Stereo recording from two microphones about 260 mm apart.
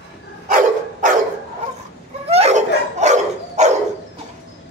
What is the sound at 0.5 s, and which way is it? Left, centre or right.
Dog, right.